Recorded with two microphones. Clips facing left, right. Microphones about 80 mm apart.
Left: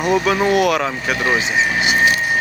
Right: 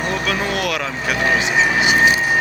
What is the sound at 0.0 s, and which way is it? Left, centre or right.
Speech, centre.